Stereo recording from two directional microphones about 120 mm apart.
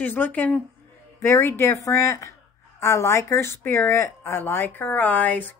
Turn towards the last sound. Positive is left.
turn(degrees=15)  # may be behind; listen again after turning